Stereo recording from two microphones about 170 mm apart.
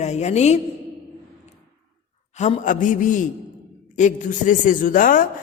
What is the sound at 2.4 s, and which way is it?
A man's voice, 45° left (ahead or behind).